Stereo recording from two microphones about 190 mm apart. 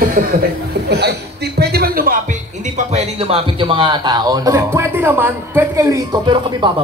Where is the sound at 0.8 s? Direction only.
60° right (ahead or behind).